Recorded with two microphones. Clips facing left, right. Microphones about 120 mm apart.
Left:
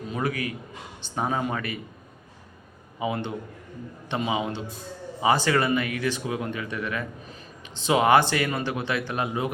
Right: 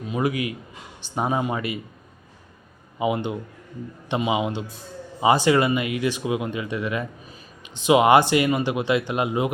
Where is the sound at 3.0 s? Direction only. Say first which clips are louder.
Right 5 dB; 15° right (ahead or behind).